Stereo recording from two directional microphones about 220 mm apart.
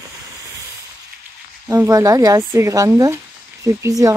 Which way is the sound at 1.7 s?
15° right (ahead or behind).